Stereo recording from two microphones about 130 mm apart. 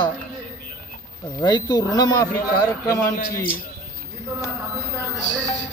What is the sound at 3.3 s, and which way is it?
Speech, 90° left.